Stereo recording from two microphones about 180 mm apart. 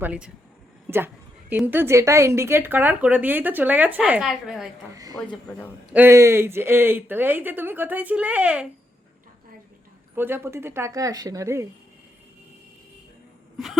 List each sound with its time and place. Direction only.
0.0 s a woman's voice: 5° right (ahead or behind)
5.9 s a woman's voice: 10° right (ahead or behind)
10.2 s a woman's voice: 10° right (ahead or behind)